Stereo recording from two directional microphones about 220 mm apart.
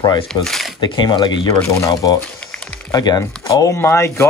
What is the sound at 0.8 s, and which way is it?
Speech, 20° left (ahead or behind).